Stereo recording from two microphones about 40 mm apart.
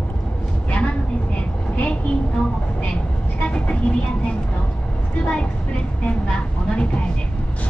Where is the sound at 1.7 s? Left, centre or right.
Left.